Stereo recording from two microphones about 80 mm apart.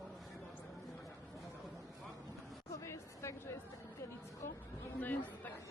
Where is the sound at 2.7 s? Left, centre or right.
Left.